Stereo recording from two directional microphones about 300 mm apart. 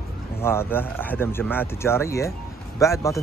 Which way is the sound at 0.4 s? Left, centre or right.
Centre.